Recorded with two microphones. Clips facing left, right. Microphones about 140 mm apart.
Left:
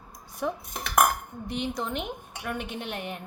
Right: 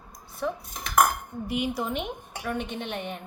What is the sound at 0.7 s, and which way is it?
Dishes, 65° left (ahead or behind).